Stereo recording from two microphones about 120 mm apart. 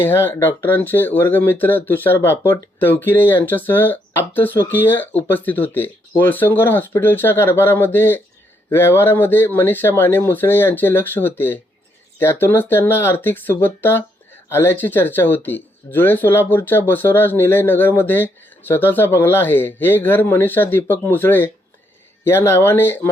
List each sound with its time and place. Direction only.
0.0 s speech: 15° left (ahead or behind)